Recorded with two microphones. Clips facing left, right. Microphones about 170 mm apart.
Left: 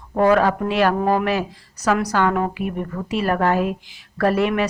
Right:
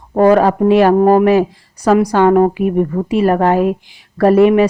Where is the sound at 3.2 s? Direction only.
30° right (ahead or behind).